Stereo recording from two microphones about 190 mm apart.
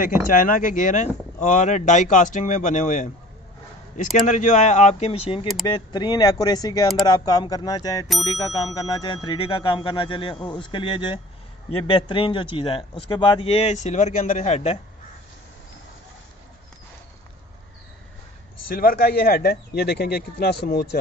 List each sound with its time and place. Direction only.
0.0 s speech: 45° left (ahead or behind)
4.3 s speech: 40° left (ahead or behind)
18.8 s speech: 50° left (ahead or behind)